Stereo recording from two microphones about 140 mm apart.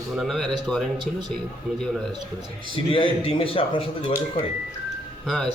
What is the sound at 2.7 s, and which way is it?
A man's voice, 40° left (ahead or behind).